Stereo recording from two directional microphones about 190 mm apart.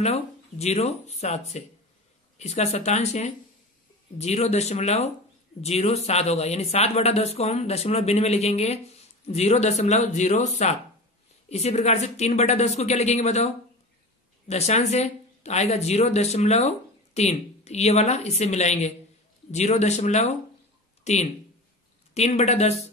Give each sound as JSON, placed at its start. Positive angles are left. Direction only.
{"t": 0.0, "sound": "speech", "side_deg": 35}
{"t": 14.5, "sound": "speech", "side_deg": 35}